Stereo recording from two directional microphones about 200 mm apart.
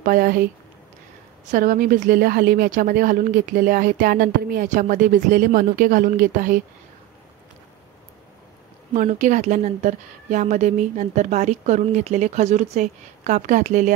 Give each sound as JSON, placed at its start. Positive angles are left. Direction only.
{"t": 0.0, "sound": "speech", "side_deg": -45}
{"t": 8.9, "sound": "a woman's voice", "side_deg": -35}